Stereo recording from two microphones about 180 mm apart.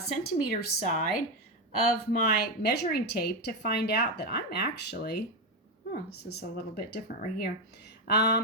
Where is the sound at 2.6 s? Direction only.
60° left (ahead or behind).